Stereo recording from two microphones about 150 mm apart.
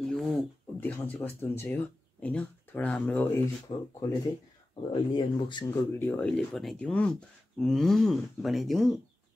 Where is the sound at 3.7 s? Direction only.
40° left (ahead or behind).